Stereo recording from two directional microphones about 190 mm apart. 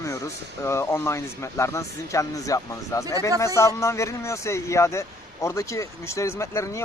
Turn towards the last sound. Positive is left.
turn(degrees=15)  # may be behind; listen again after turning